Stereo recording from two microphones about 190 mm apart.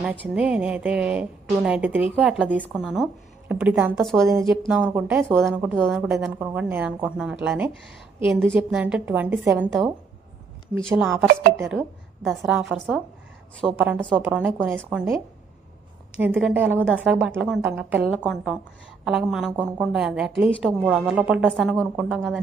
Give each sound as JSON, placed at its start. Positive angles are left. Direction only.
{"t": 0.0, "sound": "a woman's voice", "side_deg": -5}
{"t": 4.3, "sound": "a woman's voice", "side_deg": -15}
{"t": 5.5, "sound": "a woman's voice", "side_deg": 0}
{"t": 10.8, "sound": "a woman's voice", "side_deg": 0}